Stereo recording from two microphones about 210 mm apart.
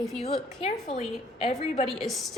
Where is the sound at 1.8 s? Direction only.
Centre (ahead or behind).